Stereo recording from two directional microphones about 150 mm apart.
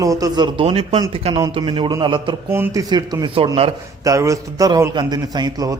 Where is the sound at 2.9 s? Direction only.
30° right (ahead or behind).